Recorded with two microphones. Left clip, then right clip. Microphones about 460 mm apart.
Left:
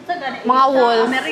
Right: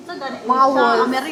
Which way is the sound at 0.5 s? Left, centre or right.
Left.